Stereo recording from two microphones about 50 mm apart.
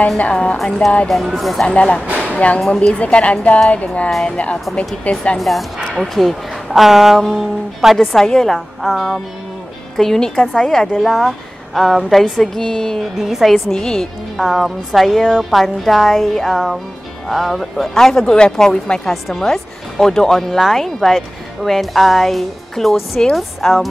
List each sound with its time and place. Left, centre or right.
0.2 s a woman's voice: left
1.0 s speech: centre
1.7 s a woman's voice: left
4.1 s speech: centre
5.1 s a woman's voice: left
5.4 s speech: centre
13.2 s speech: centre
17.9 s speech: centre